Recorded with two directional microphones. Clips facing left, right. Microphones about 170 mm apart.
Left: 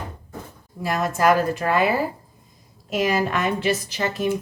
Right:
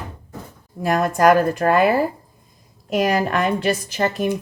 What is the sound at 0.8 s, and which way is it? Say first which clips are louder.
Speech: right 4 dB; 50° right (ahead or behind).